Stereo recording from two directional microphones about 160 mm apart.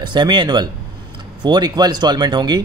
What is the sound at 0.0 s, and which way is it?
A man's voice, 30° right (ahead or behind).